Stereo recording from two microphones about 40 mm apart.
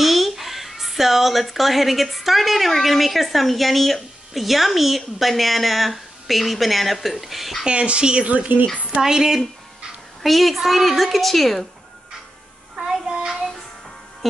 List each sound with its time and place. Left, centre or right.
0.0 s speech: centre
7.6 s speech: right
8.3 s a woman's voice: right
9.0 s speech: centre
10.2 s speech: centre
12.7 s child singing: centre